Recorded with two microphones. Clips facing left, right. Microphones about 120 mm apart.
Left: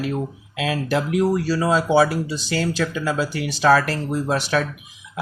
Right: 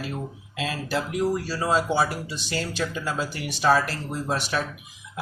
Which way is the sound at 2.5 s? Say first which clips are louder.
Left 6 dB; 90° left.